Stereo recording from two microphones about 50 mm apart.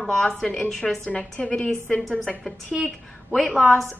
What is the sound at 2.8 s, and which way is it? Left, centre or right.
A woman's voice, centre.